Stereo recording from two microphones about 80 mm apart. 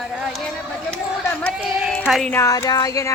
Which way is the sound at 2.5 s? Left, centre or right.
Left.